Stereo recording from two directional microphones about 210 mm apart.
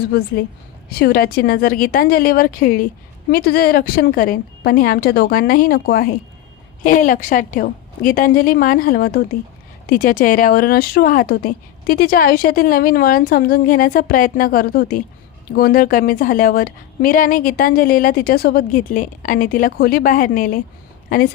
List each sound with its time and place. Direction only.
0.0 s a woman's voice: 50° left (ahead or behind)